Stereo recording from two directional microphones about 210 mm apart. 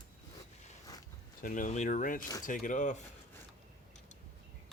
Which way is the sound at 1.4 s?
40° left (ahead or behind).